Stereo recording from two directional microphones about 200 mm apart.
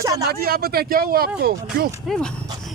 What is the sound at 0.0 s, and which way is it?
Speech, 20° right (ahead or behind).